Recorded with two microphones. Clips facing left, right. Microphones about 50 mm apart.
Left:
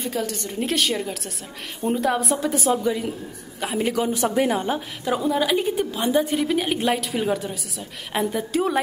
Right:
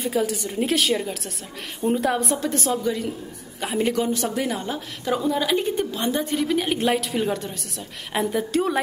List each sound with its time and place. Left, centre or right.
0.0 s a woman's voice: centre
3.6 s a woman's voice: centre
4.0 s a woman's voice: centre
5.0 s a woman's voice: centre